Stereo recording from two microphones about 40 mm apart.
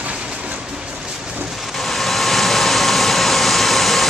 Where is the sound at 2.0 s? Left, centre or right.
Centre.